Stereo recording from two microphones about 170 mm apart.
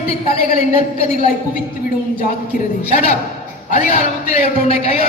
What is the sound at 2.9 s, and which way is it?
Speech, 40° left (ahead or behind).